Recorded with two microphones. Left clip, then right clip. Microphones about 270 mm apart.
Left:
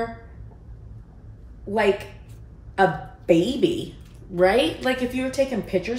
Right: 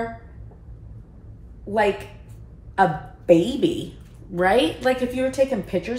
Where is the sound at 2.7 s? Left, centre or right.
Centre.